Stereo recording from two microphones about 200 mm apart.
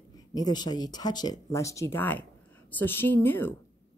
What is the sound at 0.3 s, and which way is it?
Speech, 20° left (ahead or behind).